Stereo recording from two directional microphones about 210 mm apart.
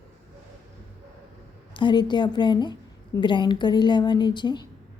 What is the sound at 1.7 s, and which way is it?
Speech, 20° left (ahead or behind).